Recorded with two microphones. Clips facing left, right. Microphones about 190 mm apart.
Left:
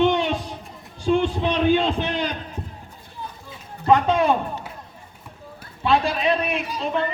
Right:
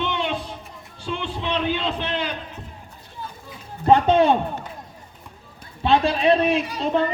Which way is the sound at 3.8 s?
30° right (ahead or behind).